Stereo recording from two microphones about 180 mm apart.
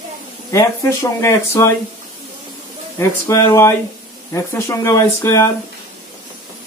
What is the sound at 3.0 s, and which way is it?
Speech, 15° left (ahead or behind).